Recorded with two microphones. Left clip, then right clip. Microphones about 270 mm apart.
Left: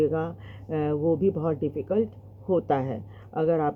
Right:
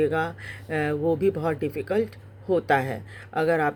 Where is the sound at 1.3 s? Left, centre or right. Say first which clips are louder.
Right 1 dB; right.